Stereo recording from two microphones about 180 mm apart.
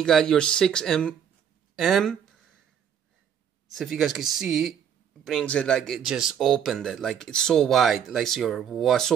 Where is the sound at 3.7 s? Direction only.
Centre (ahead or behind).